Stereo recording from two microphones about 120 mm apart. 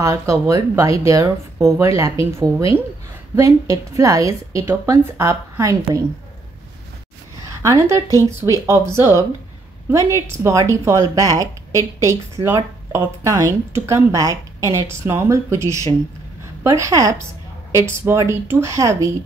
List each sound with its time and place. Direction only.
0.0 s speech: 25° right (ahead or behind)
7.4 s a woman's voice: 25° right (ahead or behind)